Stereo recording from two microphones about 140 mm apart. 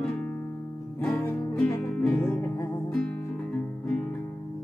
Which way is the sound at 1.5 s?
10° left (ahead or behind).